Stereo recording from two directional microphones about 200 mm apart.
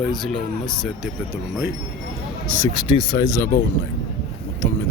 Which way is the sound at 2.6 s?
20° left (ahead or behind).